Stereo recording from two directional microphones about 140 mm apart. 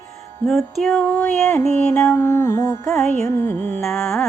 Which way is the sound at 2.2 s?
20° left (ahead or behind).